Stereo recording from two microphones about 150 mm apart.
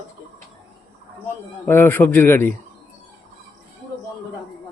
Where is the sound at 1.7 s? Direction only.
15° left (ahead or behind).